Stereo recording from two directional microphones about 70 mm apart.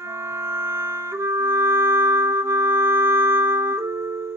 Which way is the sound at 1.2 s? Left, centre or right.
Right.